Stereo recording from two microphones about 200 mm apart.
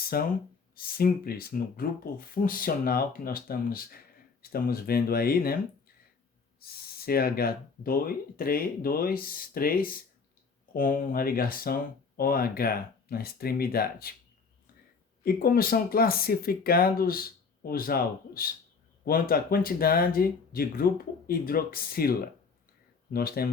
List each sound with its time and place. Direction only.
0.1 s speech: 50° left (ahead or behind)
6.6 s speech: 50° left (ahead or behind)
15.2 s speech: 45° left (ahead or behind)
23.1 s speech: 50° left (ahead or behind)